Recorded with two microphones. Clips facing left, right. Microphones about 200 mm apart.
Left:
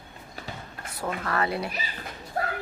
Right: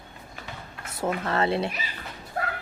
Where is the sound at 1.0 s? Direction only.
25° right (ahead or behind).